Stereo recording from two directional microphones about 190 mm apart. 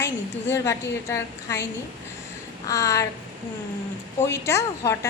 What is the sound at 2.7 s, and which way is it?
Speech, 15° left (ahead or behind).